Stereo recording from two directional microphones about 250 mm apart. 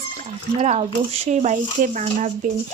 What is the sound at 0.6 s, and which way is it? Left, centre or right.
Speech, right.